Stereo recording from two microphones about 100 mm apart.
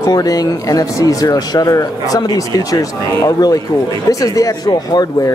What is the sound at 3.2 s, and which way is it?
Speech, 35° left (ahead or behind).